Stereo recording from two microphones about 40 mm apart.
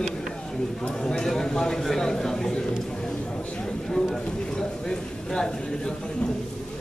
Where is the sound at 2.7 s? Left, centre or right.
Centre.